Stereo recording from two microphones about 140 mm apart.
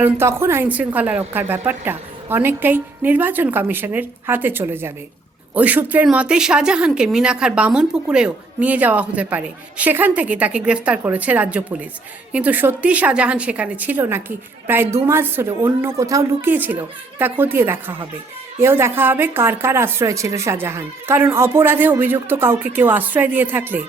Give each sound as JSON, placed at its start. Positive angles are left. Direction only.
{"t": 0.0, "sound": "a woman's voice", "side_deg": -15}